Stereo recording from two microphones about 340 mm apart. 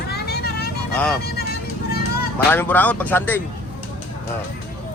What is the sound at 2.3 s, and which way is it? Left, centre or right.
A man's voice, centre.